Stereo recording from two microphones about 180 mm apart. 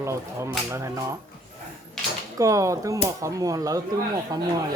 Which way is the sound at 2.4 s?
15° right (ahead or behind).